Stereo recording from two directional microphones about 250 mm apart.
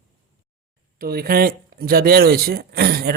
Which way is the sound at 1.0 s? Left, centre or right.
Right.